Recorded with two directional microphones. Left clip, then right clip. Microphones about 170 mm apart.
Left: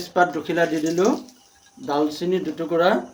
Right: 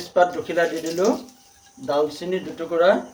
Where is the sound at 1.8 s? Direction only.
65° left (ahead or behind).